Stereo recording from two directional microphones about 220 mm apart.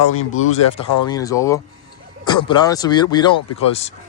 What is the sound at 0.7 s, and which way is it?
Speech, 20° left (ahead or behind).